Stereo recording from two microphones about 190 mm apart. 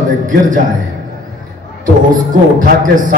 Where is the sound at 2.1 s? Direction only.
45° right (ahead or behind).